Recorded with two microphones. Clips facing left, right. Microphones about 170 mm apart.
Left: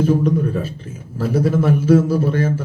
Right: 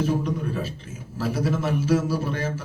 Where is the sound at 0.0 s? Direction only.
50° left (ahead or behind).